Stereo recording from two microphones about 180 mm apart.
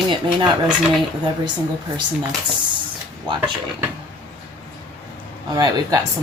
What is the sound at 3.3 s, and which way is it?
Speech, 25° right (ahead or behind).